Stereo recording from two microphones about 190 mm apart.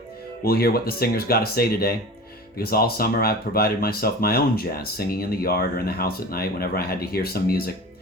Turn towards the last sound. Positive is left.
turn(degrees=55)  # may be behind; listen again after turning